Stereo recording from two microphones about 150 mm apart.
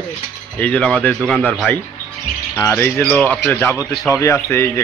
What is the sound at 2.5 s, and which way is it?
A man's voice, 15° left (ahead or behind).